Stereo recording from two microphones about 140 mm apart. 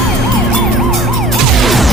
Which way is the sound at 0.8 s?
Centre (ahead or behind).